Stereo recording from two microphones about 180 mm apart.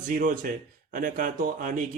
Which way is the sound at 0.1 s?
50° right (ahead or behind).